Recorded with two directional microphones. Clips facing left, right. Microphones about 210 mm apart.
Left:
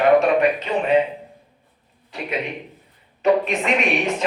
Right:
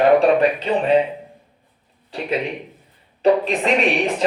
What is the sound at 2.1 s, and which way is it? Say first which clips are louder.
Speech: right 4 dB; 35° right (ahead or behind).